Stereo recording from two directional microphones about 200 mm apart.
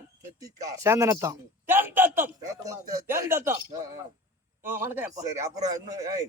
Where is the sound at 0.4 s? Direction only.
15° right (ahead or behind).